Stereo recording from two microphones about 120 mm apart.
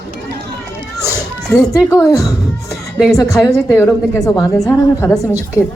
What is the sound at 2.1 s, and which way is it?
Speech, 30° left (ahead or behind).